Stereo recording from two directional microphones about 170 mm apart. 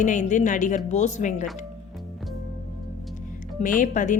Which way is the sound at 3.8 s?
50° left (ahead or behind).